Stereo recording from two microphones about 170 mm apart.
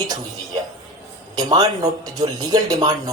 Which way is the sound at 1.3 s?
20° right (ahead or behind).